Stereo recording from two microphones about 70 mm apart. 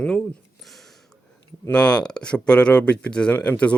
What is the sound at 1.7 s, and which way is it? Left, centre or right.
Speech, centre.